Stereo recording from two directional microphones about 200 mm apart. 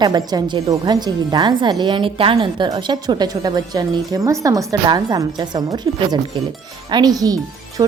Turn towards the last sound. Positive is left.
turn(degrees=-15)  # may be behind; listen again after turning